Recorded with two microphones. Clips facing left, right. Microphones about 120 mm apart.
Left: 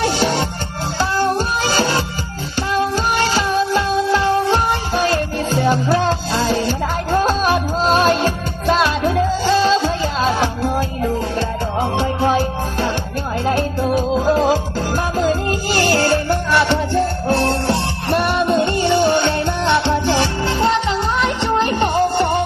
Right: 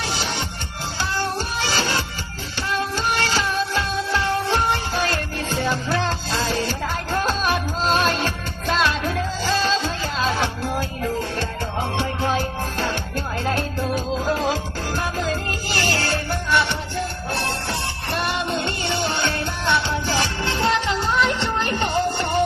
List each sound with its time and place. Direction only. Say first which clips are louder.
0.0 s music: left 9 dB; 45° left (ahead or behind)
2.9 s music: left 5 dB; 35° left (ahead or behind)
4.9 s music: left 10 dB; 25° left (ahead or behind)
5.6 s music: left 7 dB; 35° left (ahead or behind)
7.5 s music: left 5 dB; 35° left (ahead or behind)
16.5 s music: left 5 dB; 50° left (ahead or behind)
18.4 s music: left 9 dB; 30° left (ahead or behind)
21.2 s music: left 2 dB; 30° left (ahead or behind)